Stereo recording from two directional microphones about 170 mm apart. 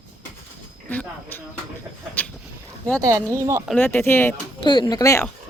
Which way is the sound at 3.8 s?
10° left (ahead or behind).